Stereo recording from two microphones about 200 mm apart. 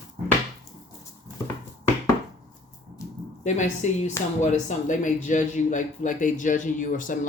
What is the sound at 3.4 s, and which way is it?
A man's voice, 35° left (ahead or behind).